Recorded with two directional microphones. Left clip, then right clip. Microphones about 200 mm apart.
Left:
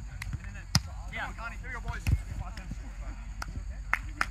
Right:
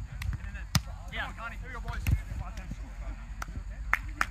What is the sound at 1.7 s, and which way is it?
Speech, 55° right (ahead or behind).